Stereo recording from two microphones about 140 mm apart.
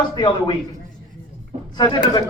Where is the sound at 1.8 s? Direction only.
30° left (ahead or behind).